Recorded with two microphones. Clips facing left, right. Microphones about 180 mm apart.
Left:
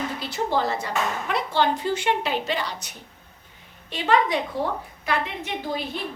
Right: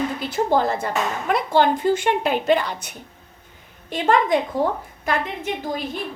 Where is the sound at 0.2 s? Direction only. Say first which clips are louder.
Right 4 dB; 50° right (ahead or behind).